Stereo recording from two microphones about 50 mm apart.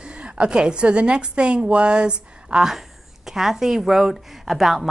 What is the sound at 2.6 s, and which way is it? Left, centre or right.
A woman's voice, centre.